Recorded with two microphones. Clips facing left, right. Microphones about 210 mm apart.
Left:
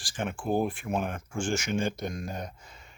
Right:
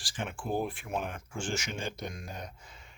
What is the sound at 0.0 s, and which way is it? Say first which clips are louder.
Speech: left 5 dB; 50° left (ahead or behind).